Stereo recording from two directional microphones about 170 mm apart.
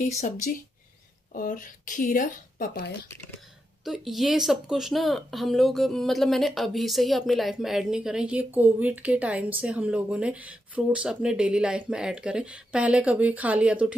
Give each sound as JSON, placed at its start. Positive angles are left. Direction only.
{"t": 1.3, "sound": "a woman's voice", "side_deg": 50}
{"t": 3.8, "sound": "speech", "side_deg": 0}